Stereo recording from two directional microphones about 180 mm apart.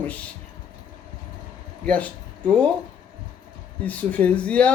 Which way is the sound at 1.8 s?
5° left (ahead or behind).